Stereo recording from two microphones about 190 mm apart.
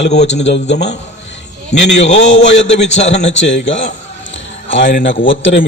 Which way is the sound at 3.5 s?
75° left (ahead or behind).